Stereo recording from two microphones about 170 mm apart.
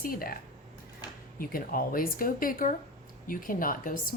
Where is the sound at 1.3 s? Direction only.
60° left (ahead or behind).